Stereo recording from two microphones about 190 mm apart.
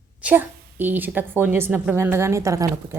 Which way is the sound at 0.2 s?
10° right (ahead or behind).